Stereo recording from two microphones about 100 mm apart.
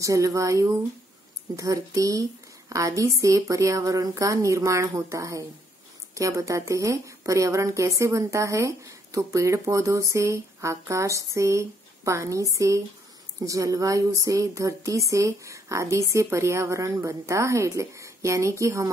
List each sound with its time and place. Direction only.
0.0 s a woman's voice: 30° right (ahead or behind)